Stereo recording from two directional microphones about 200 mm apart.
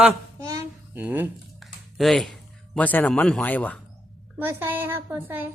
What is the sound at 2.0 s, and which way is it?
A man's voice, centre (ahead or behind).